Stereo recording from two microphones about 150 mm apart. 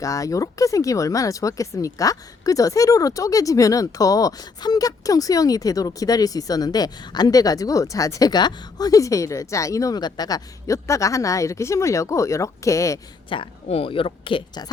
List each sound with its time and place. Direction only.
0.0 s speech: 20° left (ahead or behind)
13.3 s a woman's voice: 40° left (ahead or behind)